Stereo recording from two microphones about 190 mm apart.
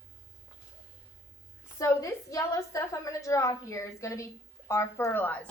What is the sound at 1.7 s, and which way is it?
A woman's voice, 15° left (ahead or behind).